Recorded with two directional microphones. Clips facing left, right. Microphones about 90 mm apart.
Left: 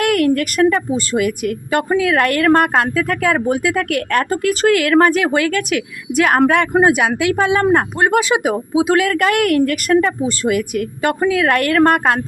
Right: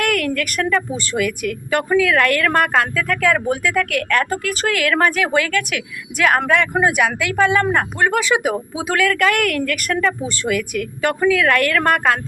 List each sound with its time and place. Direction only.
0.0 s a sound: 25° left (ahead or behind)
1.1 s a woman's voice: 30° left (ahead or behind)
6.4 s speech: 45° left (ahead or behind)
6.7 s a woman's voice: 25° left (ahead or behind)